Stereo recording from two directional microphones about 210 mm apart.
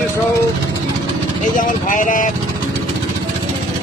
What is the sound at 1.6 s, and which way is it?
Speech, 40° left (ahead or behind).